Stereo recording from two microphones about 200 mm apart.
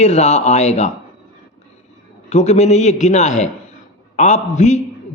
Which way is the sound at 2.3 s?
35° left (ahead or behind).